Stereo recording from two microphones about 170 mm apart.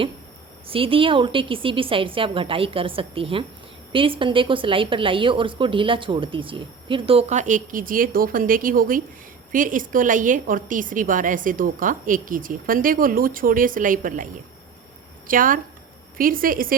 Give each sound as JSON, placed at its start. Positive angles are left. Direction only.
{"t": 0.7, "sound": "a woman's voice", "side_deg": -30}
{"t": 15.3, "sound": "a woman's voice", "side_deg": -55}